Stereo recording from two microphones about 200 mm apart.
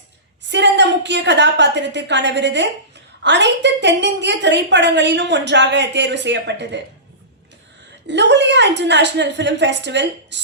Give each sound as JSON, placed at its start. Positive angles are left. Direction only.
{"t": 0.4, "sound": "a woman's voice", "side_deg": -60}
{"t": 8.0, "sound": "a woman's voice", "side_deg": -60}